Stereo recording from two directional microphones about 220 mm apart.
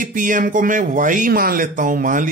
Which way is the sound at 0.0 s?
35° right (ahead or behind).